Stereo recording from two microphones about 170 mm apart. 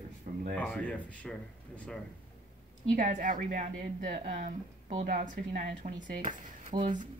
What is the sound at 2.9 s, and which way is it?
A woman's voice, 55° right (ahead or behind).